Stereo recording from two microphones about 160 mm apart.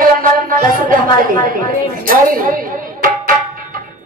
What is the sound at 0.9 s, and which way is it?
Music, 60° right (ahead or behind).